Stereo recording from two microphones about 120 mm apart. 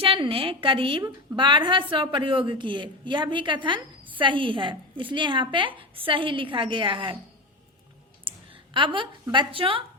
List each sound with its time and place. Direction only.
0.0 s a woman's voice: 50° right (ahead or behind)
8.7 s a woman's voice: 45° right (ahead or behind)